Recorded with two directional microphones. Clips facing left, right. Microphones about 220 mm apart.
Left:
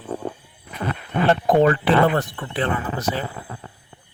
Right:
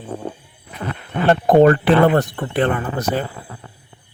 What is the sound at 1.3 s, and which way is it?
Speech, 50° right (ahead or behind).